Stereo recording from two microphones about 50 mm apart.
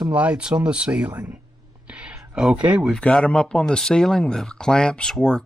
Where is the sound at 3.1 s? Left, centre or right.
Centre.